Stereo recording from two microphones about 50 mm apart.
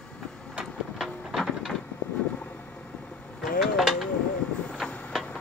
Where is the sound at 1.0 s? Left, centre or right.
Centre.